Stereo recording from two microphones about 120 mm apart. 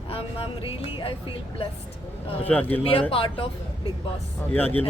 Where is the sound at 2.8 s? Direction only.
50° left (ahead or behind).